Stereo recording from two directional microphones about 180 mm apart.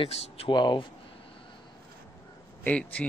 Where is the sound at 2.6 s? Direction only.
10° left (ahead or behind).